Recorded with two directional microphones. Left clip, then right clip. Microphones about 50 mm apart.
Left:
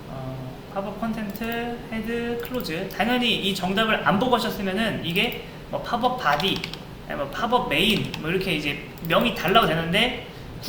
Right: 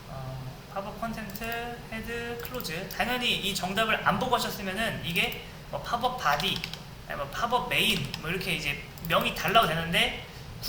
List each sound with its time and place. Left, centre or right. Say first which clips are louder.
0.7 s speech: left 5 dB; right
7.9 s speech: left 7 dB; right